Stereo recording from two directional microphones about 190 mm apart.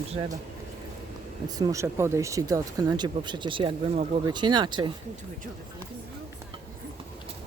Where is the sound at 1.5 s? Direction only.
20° right (ahead or behind).